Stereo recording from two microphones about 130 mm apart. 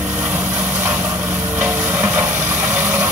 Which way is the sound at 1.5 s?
10° right (ahead or behind).